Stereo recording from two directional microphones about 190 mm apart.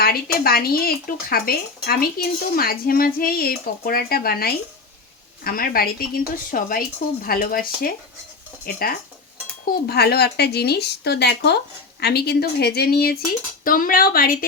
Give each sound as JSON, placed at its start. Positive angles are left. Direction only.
{"t": 0.0, "sound": "speech", "side_deg": 55}